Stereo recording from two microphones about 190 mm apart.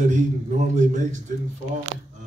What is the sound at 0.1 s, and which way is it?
Speech, 40° right (ahead or behind).